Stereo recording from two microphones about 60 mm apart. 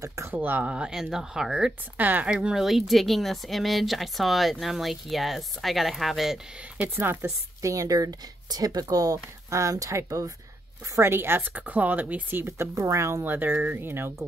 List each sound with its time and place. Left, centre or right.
0.0 s speech: right
0.3 s speech: right; by 1.7 s centre
2.0 s speech: right
2.2 s speech: centre
7.0 s speech: right
7.6 s speech: right
11.0 s speech: right
12.4 s speech: right
13.2 s speech: right